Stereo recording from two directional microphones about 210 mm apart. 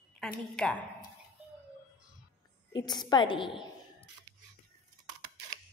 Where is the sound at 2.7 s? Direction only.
20° left (ahead or behind).